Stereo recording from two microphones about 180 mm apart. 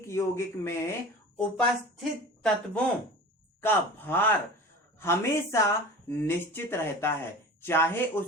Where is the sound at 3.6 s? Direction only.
10° left (ahead or behind).